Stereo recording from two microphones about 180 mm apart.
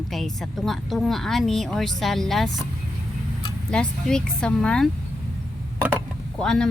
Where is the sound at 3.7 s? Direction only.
5° left (ahead or behind).